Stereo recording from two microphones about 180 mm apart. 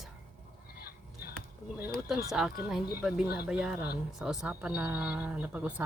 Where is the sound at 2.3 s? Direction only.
5° right (ahead or behind).